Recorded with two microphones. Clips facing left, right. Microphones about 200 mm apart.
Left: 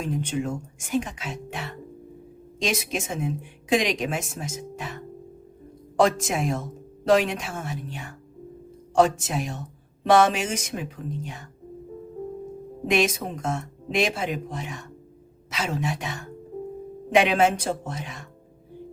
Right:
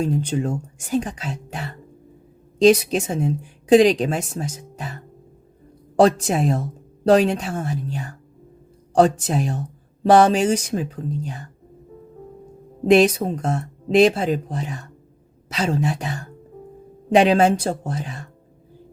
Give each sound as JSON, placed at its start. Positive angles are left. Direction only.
{"t": 0.0, "sound": "speech", "side_deg": -35}
{"t": 6.0, "sound": "speech", "side_deg": -35}
{"t": 12.9, "sound": "speech", "side_deg": -35}
{"t": 17.2, "sound": "speech", "side_deg": -35}